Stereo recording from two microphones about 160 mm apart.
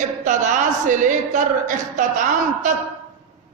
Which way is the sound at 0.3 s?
50° right (ahead or behind).